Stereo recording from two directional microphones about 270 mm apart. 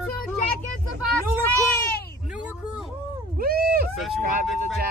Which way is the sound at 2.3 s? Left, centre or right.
Centre.